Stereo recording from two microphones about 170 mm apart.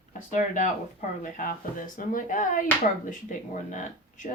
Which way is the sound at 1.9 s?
50° left (ahead or behind).